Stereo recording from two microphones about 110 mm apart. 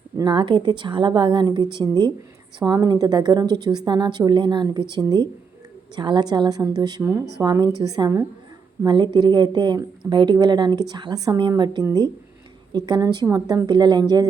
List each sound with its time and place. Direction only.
0.3 s a woman's voice: 45° right (ahead or behind)